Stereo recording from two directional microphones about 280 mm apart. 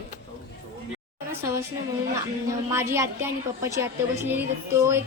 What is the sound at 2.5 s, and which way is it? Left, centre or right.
Speech, centre.